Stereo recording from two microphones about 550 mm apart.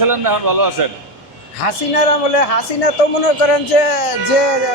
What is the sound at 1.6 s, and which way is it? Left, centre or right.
A man's voice, left.